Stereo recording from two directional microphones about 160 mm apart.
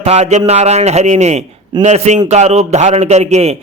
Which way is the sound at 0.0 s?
40° right (ahead or behind).